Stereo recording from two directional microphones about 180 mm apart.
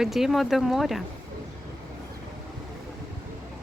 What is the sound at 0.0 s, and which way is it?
Speech, centre (ahead or behind).